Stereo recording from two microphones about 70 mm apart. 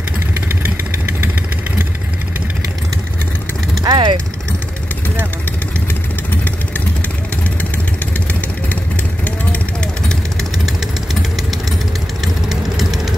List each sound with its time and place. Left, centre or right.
3.8 s vehicle: right
12.4 s vehicle: centre